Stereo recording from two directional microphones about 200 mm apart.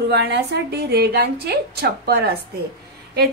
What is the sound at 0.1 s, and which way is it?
A woman's voice, 55° right (ahead or behind).